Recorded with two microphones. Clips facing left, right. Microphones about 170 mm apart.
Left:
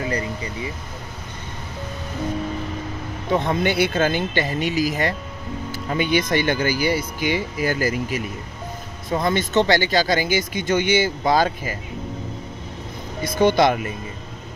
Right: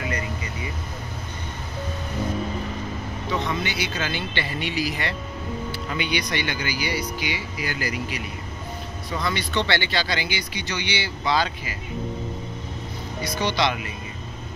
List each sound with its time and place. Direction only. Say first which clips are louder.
0.0 s a sound: left 4 dB; 35° left (ahead or behind)
3.3 s speech: left 7 dB; 50° left (ahead or behind)
13.2 s speech: left 8 dB; 50° left (ahead or behind)